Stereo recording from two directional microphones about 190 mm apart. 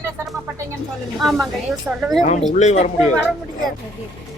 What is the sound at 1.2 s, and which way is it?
A woman's voice, centre (ahead or behind).